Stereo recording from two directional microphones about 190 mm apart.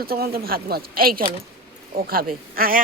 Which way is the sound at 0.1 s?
55° right (ahead or behind).